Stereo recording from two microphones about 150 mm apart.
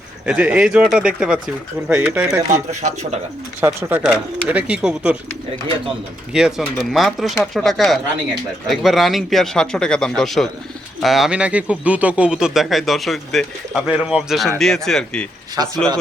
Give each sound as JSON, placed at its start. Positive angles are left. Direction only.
{"t": 0.3, "sound": "speech", "side_deg": -10}
{"t": 2.5, "sound": "speech", "side_deg": -50}
{"t": 3.6, "sound": "speech", "side_deg": -15}
{"t": 6.3, "sound": "speech", "side_deg": -5}